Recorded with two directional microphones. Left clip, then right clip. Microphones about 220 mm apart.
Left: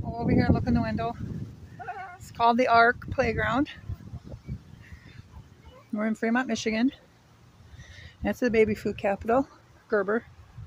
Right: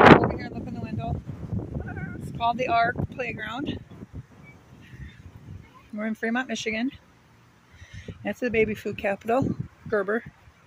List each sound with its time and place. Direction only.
0.4 s speech: 20° left (ahead or behind)
2.3 s speech: 15° left (ahead or behind)
5.9 s speech: 5° left (ahead or behind)